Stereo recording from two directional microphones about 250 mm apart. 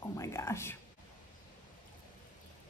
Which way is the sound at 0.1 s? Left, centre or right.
Centre.